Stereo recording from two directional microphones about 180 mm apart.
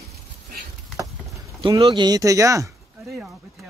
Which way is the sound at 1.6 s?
25° right (ahead or behind).